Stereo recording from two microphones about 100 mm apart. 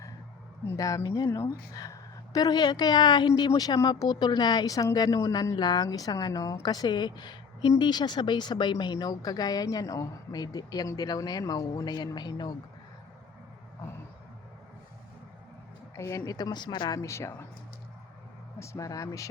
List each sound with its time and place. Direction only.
0.8 s a woman's voice: 35° left (ahead or behind)
16.0 s a woman's voice: 30° left (ahead or behind)
17.0 s speech: 30° left (ahead or behind)
18.6 s a woman's voice: 30° left (ahead or behind)